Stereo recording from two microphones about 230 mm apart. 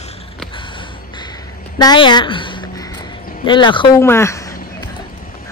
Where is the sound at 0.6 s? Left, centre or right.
Left.